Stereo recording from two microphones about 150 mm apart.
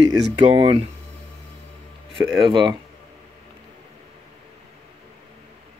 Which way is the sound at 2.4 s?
30° right (ahead or behind).